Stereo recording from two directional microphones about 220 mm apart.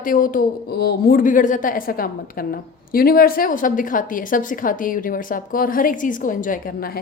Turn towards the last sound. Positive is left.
turn(degrees=40)  # may be behind; listen again after turning